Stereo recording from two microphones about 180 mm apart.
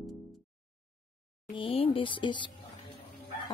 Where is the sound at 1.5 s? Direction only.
30° left (ahead or behind).